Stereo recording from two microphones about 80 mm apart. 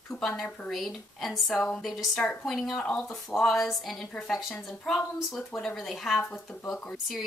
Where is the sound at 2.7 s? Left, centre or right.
Centre.